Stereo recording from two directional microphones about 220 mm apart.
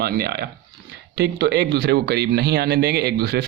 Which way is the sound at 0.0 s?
45° right (ahead or behind).